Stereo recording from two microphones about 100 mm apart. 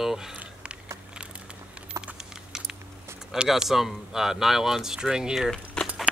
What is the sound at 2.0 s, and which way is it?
Typing, 5° right (ahead or behind).